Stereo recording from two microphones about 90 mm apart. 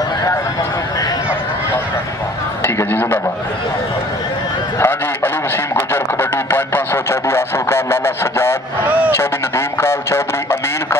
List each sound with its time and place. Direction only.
2.6 s a man's voice: 30° left (ahead or behind)
4.7 s speech: 25° left (ahead or behind)